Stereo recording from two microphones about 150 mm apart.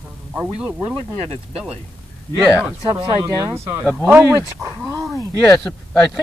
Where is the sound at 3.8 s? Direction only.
5° right (ahead or behind).